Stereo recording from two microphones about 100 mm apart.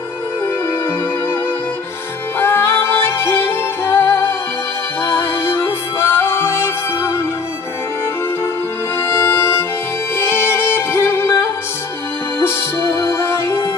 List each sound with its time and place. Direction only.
2.3 s music: 25° left (ahead or behind)
9.0 s music: 25° left (ahead or behind)
12.4 s music: 25° left (ahead or behind)